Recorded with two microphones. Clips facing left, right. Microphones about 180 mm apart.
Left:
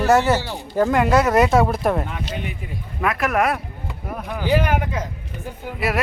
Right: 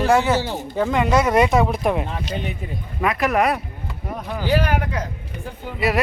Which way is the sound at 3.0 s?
Centre (ahead or behind).